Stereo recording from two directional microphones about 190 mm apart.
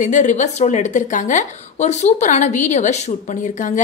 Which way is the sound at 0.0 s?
40° left (ahead or behind).